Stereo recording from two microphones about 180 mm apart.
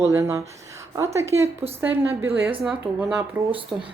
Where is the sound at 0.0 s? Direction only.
15° right (ahead or behind).